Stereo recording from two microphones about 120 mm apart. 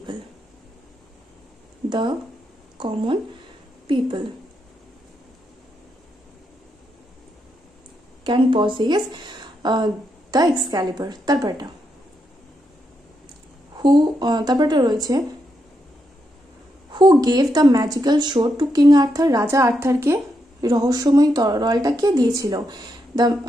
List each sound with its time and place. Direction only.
1.9 s a woman's voice: 40° right (ahead or behind)
8.2 s a woman's voice: 40° right (ahead or behind)
13.7 s speech: 40° right (ahead or behind)
16.9 s speech: 35° right (ahead or behind)